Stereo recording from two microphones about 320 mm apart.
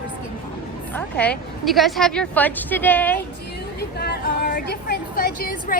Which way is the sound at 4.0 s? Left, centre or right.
Left.